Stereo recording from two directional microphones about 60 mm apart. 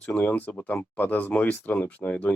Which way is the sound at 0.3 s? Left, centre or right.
Left.